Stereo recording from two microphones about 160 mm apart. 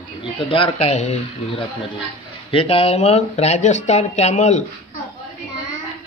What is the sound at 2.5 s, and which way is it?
Speech, 35° left (ahead or behind).